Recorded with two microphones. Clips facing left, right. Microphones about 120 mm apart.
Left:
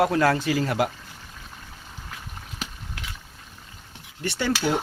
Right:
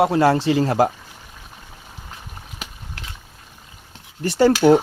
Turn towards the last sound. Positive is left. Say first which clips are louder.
# right 11 dB
turn(degrees=-40)  # may be behind; listen again after turning